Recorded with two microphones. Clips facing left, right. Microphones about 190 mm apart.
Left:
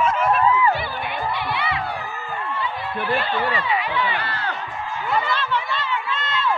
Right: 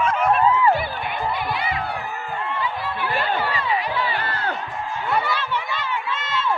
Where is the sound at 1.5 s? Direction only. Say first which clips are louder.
Even; 45° right (ahead or behind).